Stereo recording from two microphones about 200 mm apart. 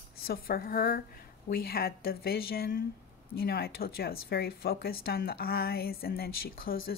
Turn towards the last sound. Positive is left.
turn(degrees=45)  # may be behind; listen again after turning